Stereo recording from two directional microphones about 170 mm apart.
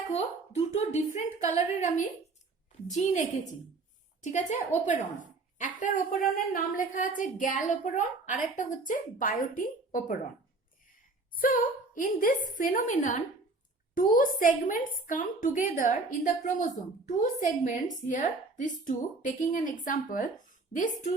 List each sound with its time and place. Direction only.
0.1 s a woman's voice: 40° left (ahead or behind)
11.3 s a woman's voice: 55° left (ahead or behind)